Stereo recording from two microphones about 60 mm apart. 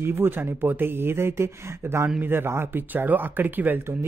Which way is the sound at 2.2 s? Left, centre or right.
Right.